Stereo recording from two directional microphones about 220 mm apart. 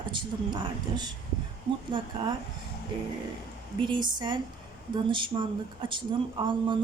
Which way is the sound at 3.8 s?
20° right (ahead or behind).